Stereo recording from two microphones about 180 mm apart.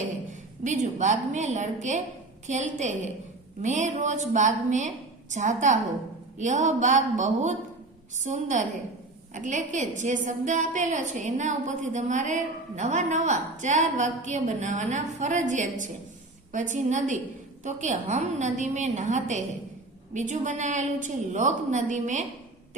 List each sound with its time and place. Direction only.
0.6 s a woman's voice: 40° right (ahead or behind)